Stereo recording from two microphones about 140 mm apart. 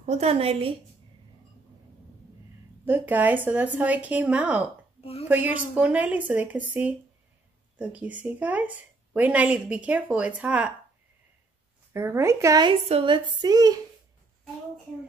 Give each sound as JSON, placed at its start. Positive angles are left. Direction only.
{"t": 0.0, "sound": "a woman's voice", "side_deg": -50}
{"t": 2.8, "sound": "a woman's voice", "side_deg": -15}
{"t": 11.9, "sound": "a woman's voice", "side_deg": -20}
{"t": 12.8, "sound": "a woman's voice", "side_deg": -45}
{"t": 13.1, "sound": "a woman's voice", "side_deg": -30}